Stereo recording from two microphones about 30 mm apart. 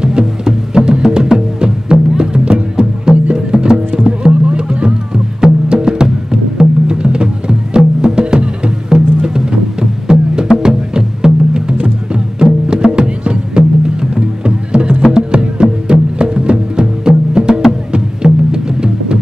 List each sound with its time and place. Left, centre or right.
0.0 s music: centre